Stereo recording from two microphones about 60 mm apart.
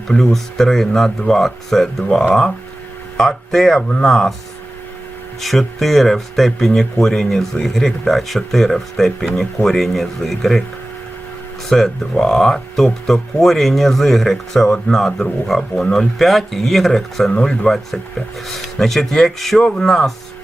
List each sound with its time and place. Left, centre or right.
0.1 s speech: centre
3.8 s speech: centre
4.0 s speech: centre
5.4 s speech: centre
11.7 s speech: centre
17.4 s speech: centre
18.4 s speech: centre